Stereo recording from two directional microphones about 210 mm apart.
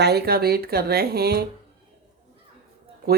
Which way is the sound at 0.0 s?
50° right (ahead or behind).